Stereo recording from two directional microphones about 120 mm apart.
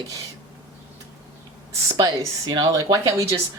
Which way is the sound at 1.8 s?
30° right (ahead or behind).